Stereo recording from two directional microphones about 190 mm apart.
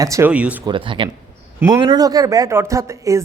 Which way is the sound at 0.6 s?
25° right (ahead or behind).